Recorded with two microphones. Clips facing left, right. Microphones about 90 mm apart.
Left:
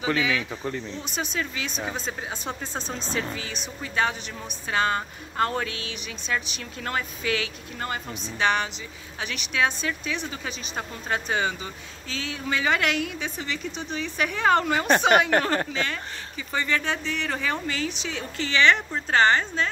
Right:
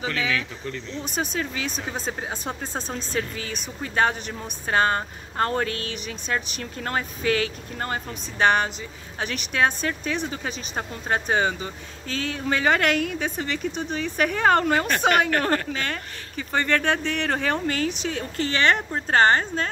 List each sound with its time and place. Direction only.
0.3 s speech: 30° left (ahead or behind)
1.0 s a woman's voice: 40° right (ahead or behind)
14.9 s speech: 25° left (ahead or behind)
15.7 s a woman's voice: 45° right (ahead or behind)